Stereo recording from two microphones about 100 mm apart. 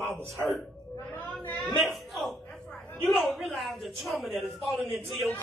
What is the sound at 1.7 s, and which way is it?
A man's voice, centre (ahead or behind).